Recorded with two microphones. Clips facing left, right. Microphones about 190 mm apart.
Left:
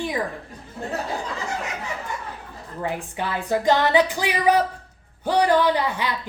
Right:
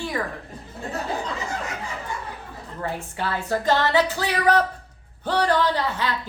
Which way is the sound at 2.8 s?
15° left (ahead or behind).